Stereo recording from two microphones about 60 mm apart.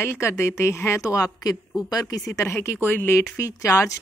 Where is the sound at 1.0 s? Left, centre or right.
Left.